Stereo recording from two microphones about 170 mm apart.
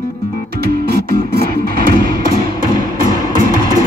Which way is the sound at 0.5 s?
60° right (ahead or behind).